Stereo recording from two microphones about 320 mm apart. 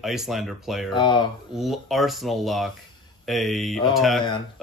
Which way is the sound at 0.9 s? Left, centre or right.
Centre.